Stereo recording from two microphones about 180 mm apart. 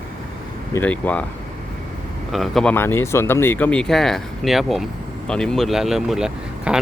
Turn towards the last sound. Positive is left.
turn(degrees=-5)  # may be behind; listen again after turning